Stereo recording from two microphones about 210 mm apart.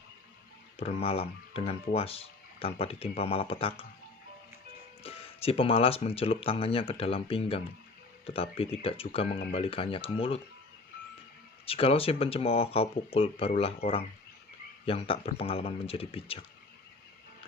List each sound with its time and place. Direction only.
0.8 s speech: 30° left (ahead or behind)
5.0 s speech: 25° left (ahead or behind)
11.6 s speech: 25° left (ahead or behind)